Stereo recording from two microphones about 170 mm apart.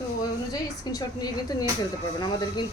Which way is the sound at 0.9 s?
20° left (ahead or behind).